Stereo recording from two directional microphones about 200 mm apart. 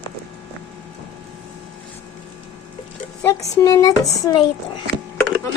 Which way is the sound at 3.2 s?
15° left (ahead or behind).